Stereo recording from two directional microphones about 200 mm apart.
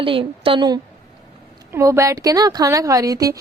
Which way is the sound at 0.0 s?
25° right (ahead or behind).